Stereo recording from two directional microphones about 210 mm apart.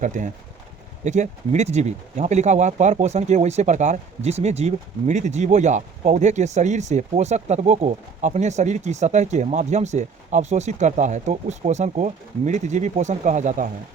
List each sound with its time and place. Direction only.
0.0 s speech: 35° right (ahead or behind)